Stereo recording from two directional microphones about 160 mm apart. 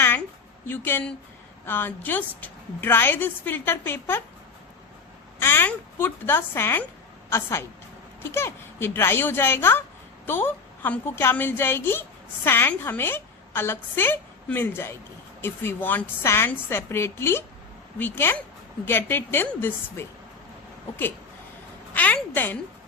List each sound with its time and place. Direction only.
0.7 s a woman's voice: 15° left (ahead or behind)
5.4 s a woman's voice: 15° left (ahead or behind)
21.9 s a sound: 10° left (ahead or behind)